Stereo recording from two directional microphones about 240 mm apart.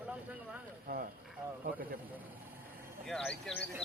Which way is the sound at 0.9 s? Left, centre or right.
Right.